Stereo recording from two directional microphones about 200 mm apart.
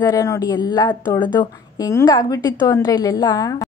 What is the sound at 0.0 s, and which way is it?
A woman's voice, 15° left (ahead or behind).